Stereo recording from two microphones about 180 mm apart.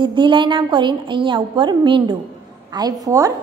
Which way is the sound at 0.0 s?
25° right (ahead or behind).